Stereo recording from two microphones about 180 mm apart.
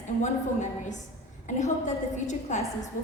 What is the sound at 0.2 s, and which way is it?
A woman's voice, 45° left (ahead or behind).